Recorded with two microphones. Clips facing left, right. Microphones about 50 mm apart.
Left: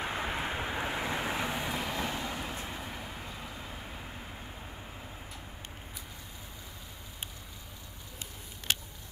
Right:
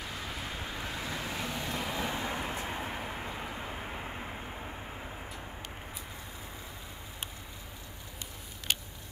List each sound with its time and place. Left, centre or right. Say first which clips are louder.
0.0 s vehicle: left 6 dB; left
1.7 s vehicle: even; centre
2.1 s vehicle: right 2 dB; right